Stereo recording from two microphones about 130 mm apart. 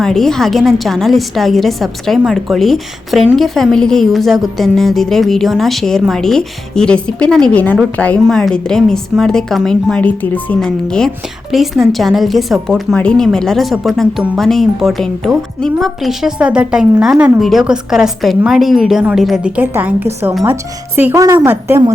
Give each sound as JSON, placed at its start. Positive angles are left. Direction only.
{"t": 0.0, "sound": "a woman's voice", "side_deg": 5}